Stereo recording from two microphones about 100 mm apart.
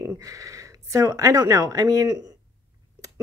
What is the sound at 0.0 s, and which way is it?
Speech, 30° right (ahead or behind).